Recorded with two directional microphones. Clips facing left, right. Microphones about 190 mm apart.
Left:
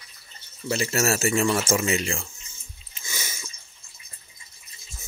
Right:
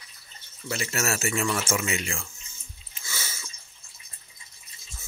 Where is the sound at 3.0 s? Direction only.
15° left (ahead or behind).